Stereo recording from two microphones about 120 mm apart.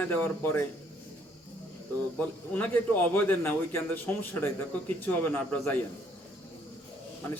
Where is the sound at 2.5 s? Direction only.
10° left (ahead or behind).